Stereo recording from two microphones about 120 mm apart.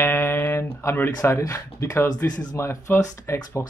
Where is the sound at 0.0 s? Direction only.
20° left (ahead or behind).